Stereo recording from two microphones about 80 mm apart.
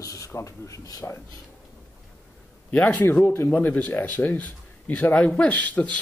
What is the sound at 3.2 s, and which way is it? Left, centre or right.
A man's voice, left.